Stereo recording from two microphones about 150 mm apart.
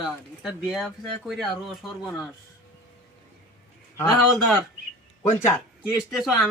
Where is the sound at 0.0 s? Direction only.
5° right (ahead or behind).